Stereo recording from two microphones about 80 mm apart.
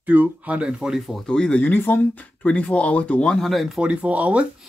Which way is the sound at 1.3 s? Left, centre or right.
Centre.